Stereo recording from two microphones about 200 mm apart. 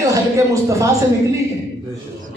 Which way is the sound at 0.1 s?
15° right (ahead or behind).